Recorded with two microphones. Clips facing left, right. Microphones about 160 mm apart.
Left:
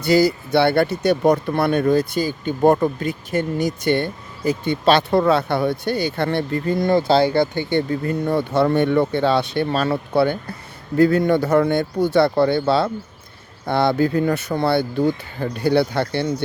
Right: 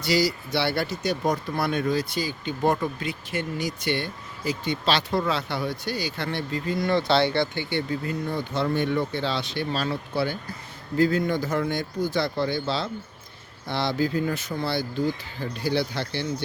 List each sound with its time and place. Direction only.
0.0 s speech: 55° left (ahead or behind)